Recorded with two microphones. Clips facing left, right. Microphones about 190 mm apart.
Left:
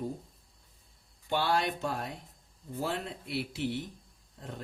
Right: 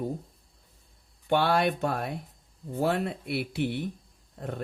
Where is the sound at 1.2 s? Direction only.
60° right (ahead or behind).